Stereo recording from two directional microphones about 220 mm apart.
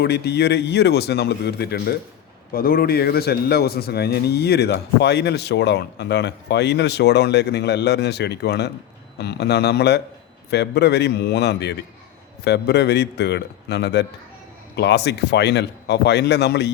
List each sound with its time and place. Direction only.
0.0 s a man's voice: 45° left (ahead or behind)